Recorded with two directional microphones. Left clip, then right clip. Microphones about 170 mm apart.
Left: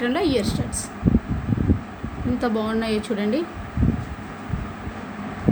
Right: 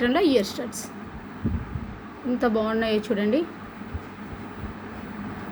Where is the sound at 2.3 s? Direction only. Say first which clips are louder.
Right 1 dB; 25° right (ahead or behind).